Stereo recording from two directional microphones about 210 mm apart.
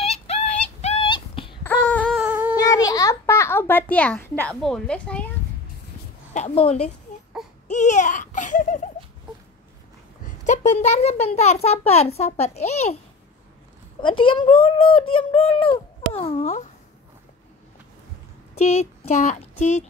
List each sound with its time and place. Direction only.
0.0 s yodeling: 30° left (ahead or behind)
0.7 s dog: 30° left (ahead or behind)
1.6 s a sound: 10° left (ahead or behind)
2.1 s humming: 5° right (ahead or behind)
2.5 s a sound: 15° left (ahead or behind)
6.3 s a child's voice: 30° left (ahead or behind)
10.2 s a child's voice: 35° left (ahead or behind)
14.0 s speech: 25° left (ahead or behind)
18.6 s speech: 30° left (ahead or behind)